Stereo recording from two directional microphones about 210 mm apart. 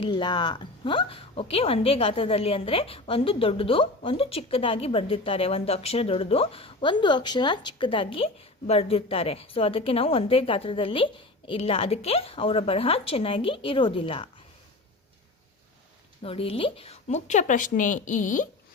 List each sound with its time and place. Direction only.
0.0 s a woman's voice: 20° left (ahead or behind)
16.2 s speech: 25° left (ahead or behind)